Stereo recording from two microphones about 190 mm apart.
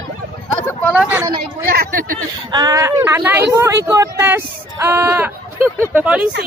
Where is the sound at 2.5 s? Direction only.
20° right (ahead or behind).